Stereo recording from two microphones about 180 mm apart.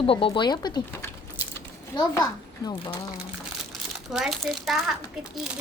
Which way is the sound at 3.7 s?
Centre (ahead or behind).